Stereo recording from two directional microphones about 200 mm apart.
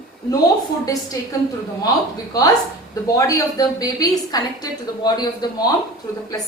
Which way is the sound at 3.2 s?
15° left (ahead or behind).